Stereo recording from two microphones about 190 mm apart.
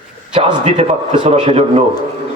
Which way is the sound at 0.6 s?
35° right (ahead or behind).